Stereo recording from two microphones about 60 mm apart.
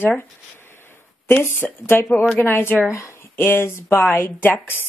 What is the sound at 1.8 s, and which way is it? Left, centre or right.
Speech, left.